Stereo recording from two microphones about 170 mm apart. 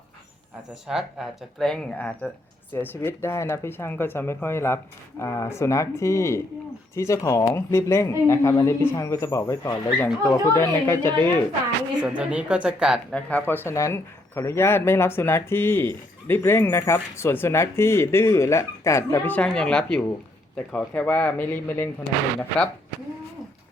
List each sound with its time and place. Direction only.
0.7 s speech: centre (ahead or behind)
11.9 s speech: 5° right (ahead or behind)
13.1 s speech: 10° left (ahead or behind)